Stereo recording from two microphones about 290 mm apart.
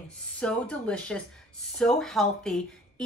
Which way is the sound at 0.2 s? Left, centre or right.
Centre.